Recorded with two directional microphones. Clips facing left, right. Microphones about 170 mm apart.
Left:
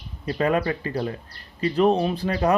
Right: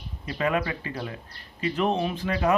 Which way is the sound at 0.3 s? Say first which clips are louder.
Left 4 dB; 40° left (ahead or behind).